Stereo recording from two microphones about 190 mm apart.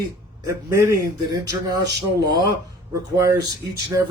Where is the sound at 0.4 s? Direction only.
15° right (ahead or behind).